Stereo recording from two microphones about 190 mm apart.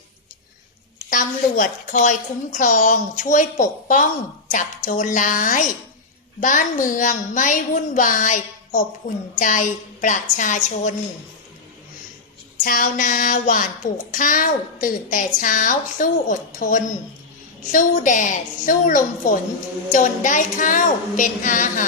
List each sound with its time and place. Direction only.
1.1 s a woman's voice: 45° left (ahead or behind)
12.6 s a woman's voice: 45° left (ahead or behind)